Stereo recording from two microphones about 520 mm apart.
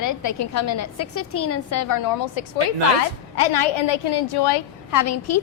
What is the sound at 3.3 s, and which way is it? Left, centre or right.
A woman's voice, left.